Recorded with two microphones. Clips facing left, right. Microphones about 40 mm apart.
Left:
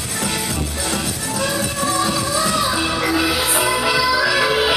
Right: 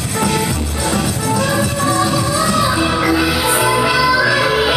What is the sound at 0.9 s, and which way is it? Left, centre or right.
Music, centre.